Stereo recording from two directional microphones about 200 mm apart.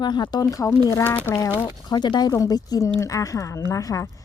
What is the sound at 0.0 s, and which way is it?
A woman's voice, 20° left (ahead or behind).